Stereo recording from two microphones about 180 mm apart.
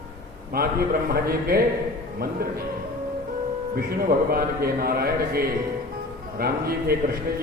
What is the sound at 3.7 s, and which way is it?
A man's voice, 55° right (ahead or behind).